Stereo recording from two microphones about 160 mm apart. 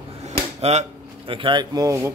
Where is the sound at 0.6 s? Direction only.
40° right (ahead or behind); by 2.1 s 20° right (ahead or behind).